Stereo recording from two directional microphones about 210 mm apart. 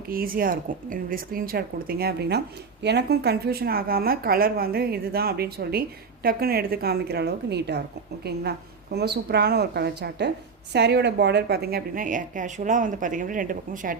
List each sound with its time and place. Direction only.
0.1 s speech: 45° right (ahead or behind)